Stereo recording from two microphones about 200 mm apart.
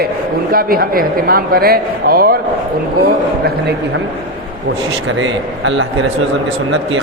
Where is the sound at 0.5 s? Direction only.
45° right (ahead or behind).